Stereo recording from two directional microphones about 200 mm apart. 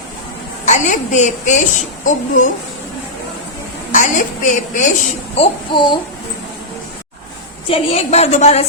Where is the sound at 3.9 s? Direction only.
40° left (ahead or behind).